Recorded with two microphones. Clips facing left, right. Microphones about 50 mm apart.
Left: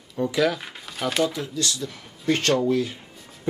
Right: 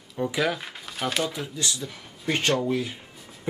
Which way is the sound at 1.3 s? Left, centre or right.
Centre.